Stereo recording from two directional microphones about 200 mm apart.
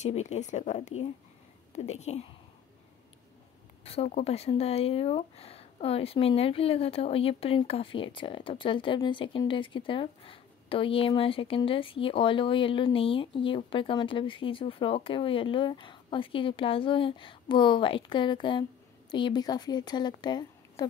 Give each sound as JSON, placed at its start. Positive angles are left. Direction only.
{"t": 0.0, "sound": "speech", "side_deg": 35}
{"t": 3.8, "sound": "speech", "side_deg": 30}